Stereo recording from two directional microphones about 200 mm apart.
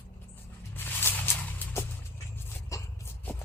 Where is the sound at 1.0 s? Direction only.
10° left (ahead or behind).